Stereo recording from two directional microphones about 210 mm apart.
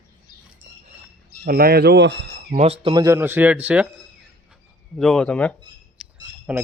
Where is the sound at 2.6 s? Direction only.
25° right (ahead or behind); by 3.9 s 5° right (ahead or behind).